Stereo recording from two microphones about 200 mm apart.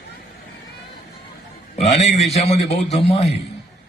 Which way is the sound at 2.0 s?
Centre (ahead or behind).